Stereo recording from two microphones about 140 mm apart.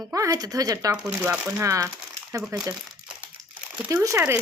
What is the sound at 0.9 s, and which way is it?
Speech, 15° right (ahead or behind).